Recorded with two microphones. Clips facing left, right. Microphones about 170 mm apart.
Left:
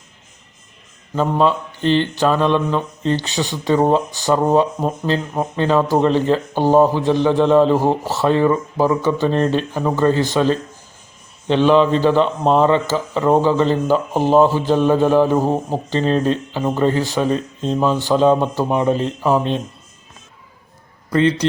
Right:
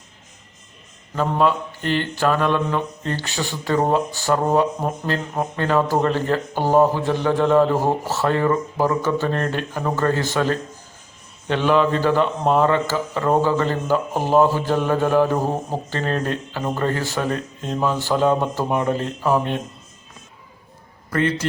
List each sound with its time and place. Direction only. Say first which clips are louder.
1.1 s speech: left 3 dB; 20° left (ahead or behind)
21.1 s a man's voice: left 5 dB; 20° left (ahead or behind)